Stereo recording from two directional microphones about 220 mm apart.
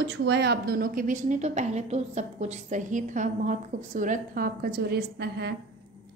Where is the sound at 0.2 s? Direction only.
50° right (ahead or behind).